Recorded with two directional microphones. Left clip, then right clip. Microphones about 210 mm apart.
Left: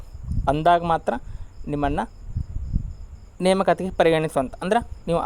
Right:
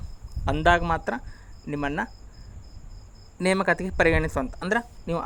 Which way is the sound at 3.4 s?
20° left (ahead or behind).